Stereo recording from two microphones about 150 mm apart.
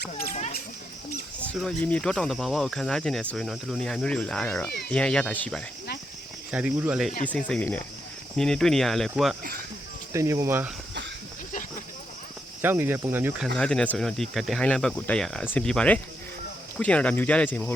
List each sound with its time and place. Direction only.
0.0 s a child's voice: 75° left (ahead or behind)
1.5 s speech: 5° left (ahead or behind)
6.5 s speech: 10° right (ahead or behind)
7.3 s speech: 10° left (ahead or behind)
10.1 s speech: 20° right (ahead or behind)
12.6 s speech: 15° right (ahead or behind)
13.6 s speech: 5° left (ahead or behind)